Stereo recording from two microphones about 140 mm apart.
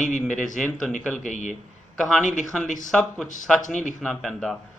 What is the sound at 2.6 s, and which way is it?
Speech, 65° left (ahead or behind).